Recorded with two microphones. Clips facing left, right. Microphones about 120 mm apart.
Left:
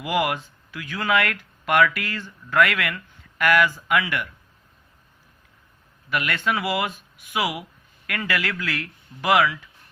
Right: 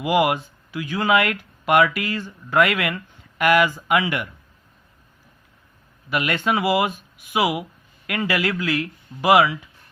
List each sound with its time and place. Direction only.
0.0 s speech: 20° right (ahead or behind)
6.1 s speech: 20° right (ahead or behind)